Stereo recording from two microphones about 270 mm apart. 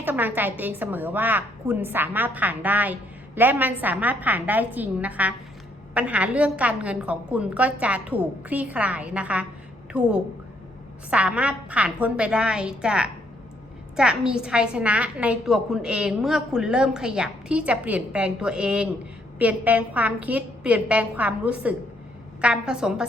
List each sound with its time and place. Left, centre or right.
0.0 s a woman's voice: centre
11.1 s a woman's voice: centre